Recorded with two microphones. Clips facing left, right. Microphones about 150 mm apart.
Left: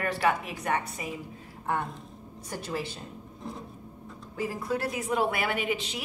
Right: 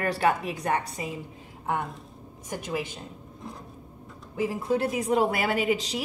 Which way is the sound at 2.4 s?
15° right (ahead or behind).